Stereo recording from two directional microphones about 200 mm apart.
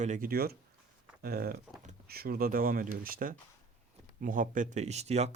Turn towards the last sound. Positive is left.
turn(degrees=-35)  # may be behind; listen again after turning